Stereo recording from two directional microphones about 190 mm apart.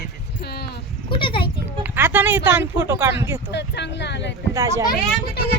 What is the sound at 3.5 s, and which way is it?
Speech, 65° left (ahead or behind).